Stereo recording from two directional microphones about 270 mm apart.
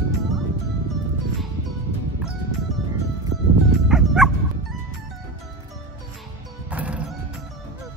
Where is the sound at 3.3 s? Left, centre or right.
Right.